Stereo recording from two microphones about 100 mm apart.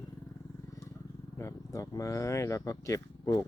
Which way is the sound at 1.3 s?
30° left (ahead or behind).